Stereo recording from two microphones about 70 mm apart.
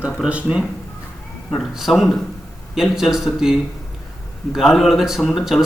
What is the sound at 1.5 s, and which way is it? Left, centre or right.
Speech, centre.